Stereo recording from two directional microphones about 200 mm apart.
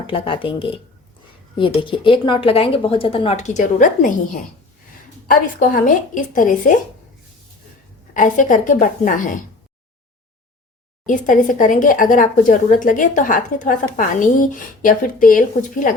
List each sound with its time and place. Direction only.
0.1 s a woman's voice: 25° left (ahead or behind)
5.3 s a woman's voice: 45° left (ahead or behind)
8.1 s a woman's voice: 40° left (ahead or behind)
11.0 s a woman's voice: 40° left (ahead or behind)